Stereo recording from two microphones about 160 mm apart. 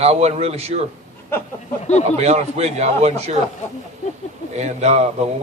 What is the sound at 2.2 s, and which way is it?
A man's voice, 45° right (ahead or behind).